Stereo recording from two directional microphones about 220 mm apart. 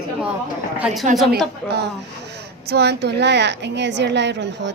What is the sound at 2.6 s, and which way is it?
A woman's voice, 50° right (ahead or behind).